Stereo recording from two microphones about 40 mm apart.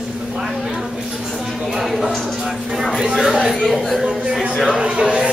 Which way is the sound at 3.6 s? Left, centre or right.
Centre.